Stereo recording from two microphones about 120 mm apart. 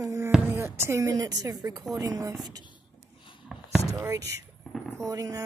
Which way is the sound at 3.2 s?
45° left (ahead or behind).